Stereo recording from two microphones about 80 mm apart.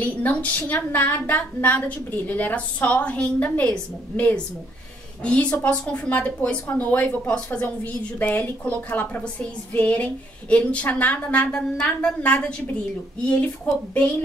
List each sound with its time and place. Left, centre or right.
0.0 s a woman's voice: centre